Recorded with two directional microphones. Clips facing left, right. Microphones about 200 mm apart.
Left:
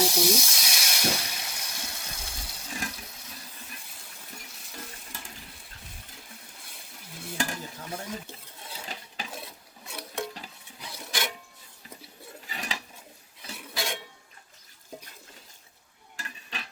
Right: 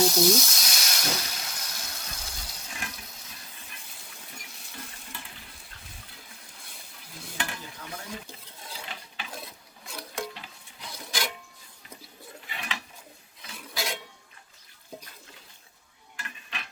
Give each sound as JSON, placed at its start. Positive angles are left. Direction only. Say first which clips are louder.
{"t": 0.0, "sound": "hiss", "louder": "right 3 dB", "side_deg": 10}
{"t": 7.3, "sound": "stir", "louder": "left 4 dB", "side_deg": 40}
{"t": 9.3, "sound": "a sound", "louder": "even", "side_deg": 5}
{"t": 12.5, "sound": "a sound", "louder": "left 1 dB", "side_deg": 40}
{"t": 13.7, "sound": "dishes", "louder": "even", "side_deg": 0}
{"t": 16.1, "sound": "stir", "louder": "left 1 dB", "side_deg": 35}